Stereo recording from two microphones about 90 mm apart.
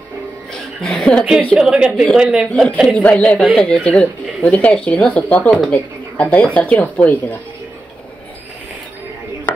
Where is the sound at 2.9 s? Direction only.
15° left (ahead or behind).